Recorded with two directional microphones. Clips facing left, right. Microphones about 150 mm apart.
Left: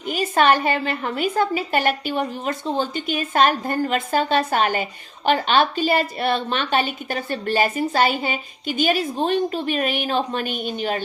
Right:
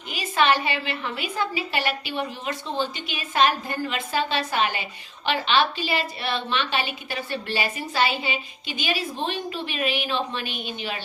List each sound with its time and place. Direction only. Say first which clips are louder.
0.0 s a woman's voice: left 5 dB; 45° left (ahead or behind)